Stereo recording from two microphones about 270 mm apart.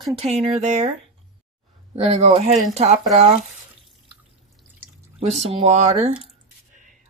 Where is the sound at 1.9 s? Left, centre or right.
Right.